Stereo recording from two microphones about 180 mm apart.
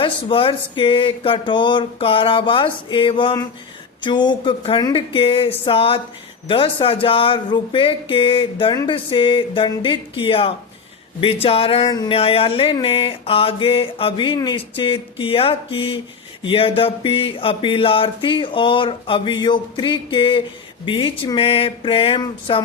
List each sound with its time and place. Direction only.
0.0 s speech: 30° left (ahead or behind)